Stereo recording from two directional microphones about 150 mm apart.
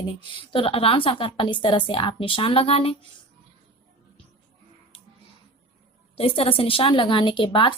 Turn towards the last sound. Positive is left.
turn(degrees=35)  # may be behind; listen again after turning